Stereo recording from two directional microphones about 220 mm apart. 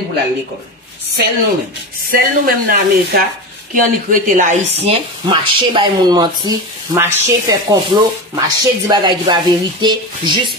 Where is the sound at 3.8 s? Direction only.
35° right (ahead or behind).